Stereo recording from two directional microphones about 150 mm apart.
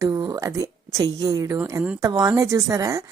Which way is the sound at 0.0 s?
25° right (ahead or behind).